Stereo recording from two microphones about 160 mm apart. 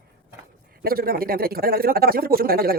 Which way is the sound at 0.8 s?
70° right (ahead or behind).